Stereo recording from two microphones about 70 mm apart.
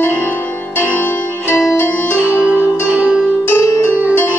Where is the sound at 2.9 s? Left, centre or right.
Centre.